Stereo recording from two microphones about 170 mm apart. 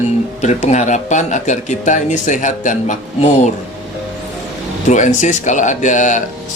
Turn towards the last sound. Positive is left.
turn(degrees=50)  # may be behind; listen again after turning